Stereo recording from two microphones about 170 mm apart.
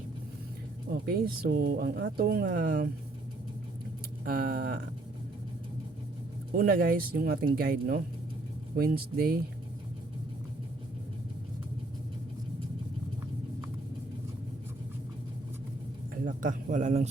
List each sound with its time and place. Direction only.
1.0 s speech: 60° right (ahead or behind)
4.3 s speech: 55° right (ahead or behind)
6.5 s speech: 60° right (ahead or behind)
16.2 s a man's voice: 50° right (ahead or behind)